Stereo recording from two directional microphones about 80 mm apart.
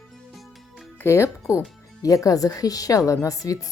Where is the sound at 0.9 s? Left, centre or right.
Left.